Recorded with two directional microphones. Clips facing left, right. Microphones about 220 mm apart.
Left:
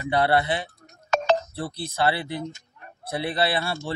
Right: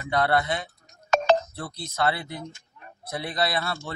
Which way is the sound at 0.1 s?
30° left (ahead or behind).